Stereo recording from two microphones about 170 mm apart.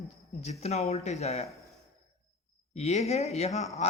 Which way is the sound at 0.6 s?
40° left (ahead or behind).